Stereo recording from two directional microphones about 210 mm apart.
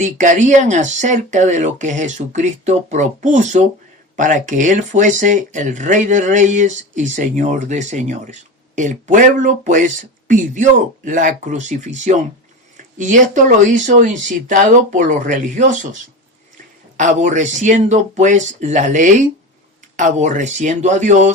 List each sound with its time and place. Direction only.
0.0 s speech: 35° right (ahead or behind)
17.0 s speech: 35° right (ahead or behind)